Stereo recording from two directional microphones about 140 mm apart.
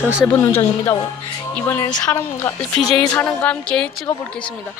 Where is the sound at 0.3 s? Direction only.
20° left (ahead or behind).